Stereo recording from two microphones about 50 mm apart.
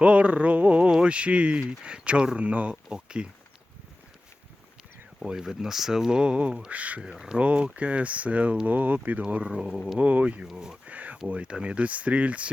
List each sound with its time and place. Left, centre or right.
0.0 s a sound: right
0.9 s speech: centre
2.4 s speech: right
5.2 s speech: centre; by 7.0 s right
7.1 s speech: centre
7.3 s speech: right
9.2 s speech: right
10.0 s speech: right
10.4 s speech: centre
10.8 s a sound: right
11.3 s speech: right